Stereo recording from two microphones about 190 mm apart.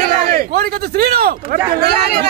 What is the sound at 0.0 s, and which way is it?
A man's voice, 50° right (ahead or behind).